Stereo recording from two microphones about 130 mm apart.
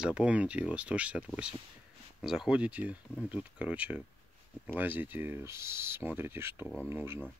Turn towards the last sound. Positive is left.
turn(degrees=-20)  # may be behind; listen again after turning